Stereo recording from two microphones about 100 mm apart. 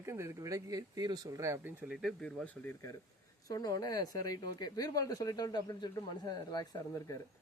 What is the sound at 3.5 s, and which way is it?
Speech, 35° left (ahead or behind).